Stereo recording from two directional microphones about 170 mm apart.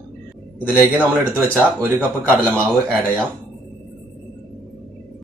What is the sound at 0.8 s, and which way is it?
Speech, 15° right (ahead or behind).